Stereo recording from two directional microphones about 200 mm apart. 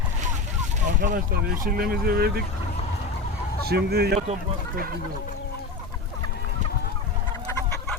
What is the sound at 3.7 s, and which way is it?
Speech, 55° right (ahead or behind).